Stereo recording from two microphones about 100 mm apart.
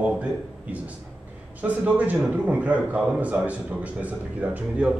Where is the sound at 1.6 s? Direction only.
15° right (ahead or behind).